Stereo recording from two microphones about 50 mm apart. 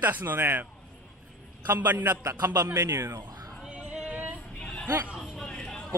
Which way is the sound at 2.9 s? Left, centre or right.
Right.